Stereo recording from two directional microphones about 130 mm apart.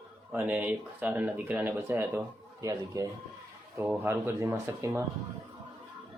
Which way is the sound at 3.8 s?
15° right (ahead or behind).